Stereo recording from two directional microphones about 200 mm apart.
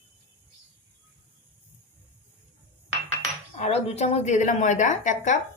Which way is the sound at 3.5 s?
35° left (ahead or behind).